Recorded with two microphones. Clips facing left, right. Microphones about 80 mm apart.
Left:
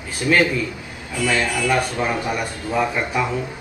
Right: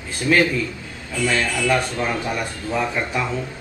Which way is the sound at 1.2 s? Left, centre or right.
Centre.